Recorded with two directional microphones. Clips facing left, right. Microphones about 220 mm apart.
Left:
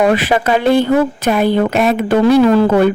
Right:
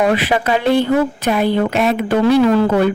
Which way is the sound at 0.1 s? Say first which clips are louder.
Left 2 dB; 45° left (ahead or behind).